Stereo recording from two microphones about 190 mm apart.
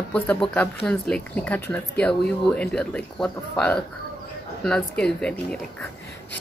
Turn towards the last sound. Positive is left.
turn(degrees=5)  # may be behind; listen again after turning